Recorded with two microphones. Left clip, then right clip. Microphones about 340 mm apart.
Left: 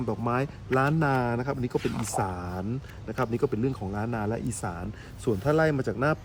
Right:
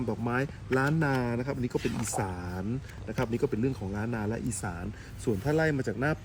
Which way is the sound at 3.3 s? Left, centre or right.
Centre.